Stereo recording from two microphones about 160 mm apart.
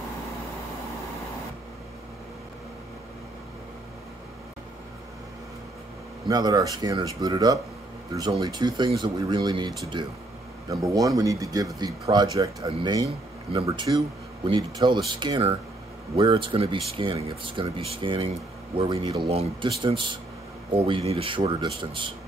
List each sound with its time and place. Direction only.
6.2 s speech: 25° right (ahead or behind)